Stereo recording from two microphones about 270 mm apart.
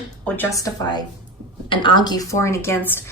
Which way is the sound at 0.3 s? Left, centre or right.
Centre.